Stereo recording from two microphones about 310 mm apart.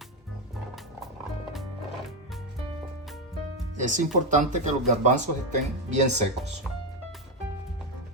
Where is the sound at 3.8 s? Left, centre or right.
Right.